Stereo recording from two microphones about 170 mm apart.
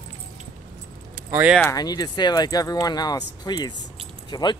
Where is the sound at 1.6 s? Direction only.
20° left (ahead or behind).